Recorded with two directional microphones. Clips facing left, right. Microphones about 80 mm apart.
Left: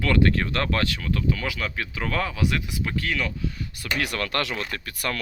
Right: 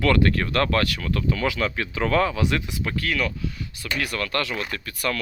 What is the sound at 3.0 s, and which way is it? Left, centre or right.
Speech, centre.